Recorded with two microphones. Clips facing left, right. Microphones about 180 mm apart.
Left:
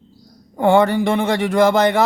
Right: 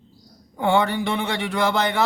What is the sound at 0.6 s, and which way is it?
Speech, 45° left (ahead or behind).